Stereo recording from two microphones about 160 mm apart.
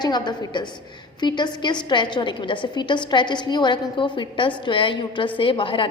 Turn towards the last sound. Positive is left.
turn(degrees=30)  # may be behind; listen again after turning